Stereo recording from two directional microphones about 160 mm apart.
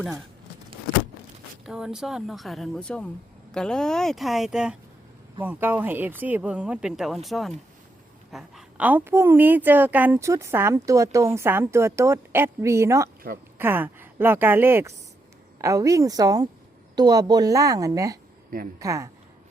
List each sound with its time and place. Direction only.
1.6 s a woman's voice: 5° right (ahead or behind); by 19.1 s 20° right (ahead or behind)